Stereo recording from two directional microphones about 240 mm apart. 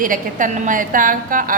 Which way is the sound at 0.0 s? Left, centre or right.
Right.